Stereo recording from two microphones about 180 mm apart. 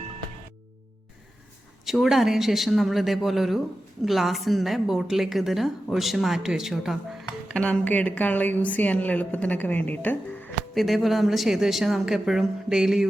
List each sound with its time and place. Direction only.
1.8 s a woman's voice: centre (ahead or behind)
10.8 s a woman's voice: centre (ahead or behind)